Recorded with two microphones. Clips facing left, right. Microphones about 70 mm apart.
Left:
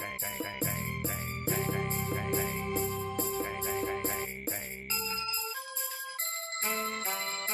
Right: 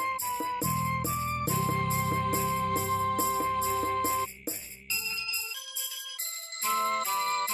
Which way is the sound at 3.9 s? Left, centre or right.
Left.